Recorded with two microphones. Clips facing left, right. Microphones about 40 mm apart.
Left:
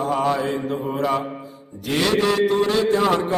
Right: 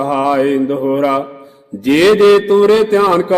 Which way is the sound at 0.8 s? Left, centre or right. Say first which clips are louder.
Right 9 dB; right.